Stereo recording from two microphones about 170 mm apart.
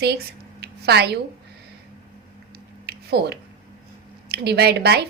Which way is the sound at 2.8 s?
75° right (ahead or behind).